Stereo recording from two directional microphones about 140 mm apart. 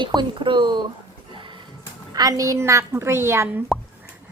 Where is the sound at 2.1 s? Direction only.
25° right (ahead or behind).